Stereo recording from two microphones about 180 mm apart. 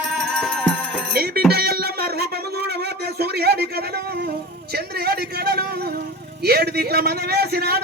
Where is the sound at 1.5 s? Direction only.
60° right (ahead or behind).